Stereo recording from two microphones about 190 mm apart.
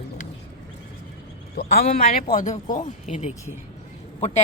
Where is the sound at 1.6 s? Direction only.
55° left (ahead or behind).